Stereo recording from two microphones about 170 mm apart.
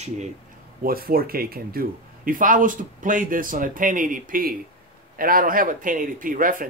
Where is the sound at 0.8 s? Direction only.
60° right (ahead or behind).